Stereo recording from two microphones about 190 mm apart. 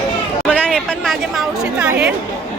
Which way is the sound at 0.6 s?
5° left (ahead or behind).